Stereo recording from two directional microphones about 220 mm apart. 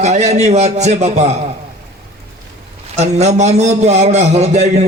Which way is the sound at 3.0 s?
30° right (ahead or behind).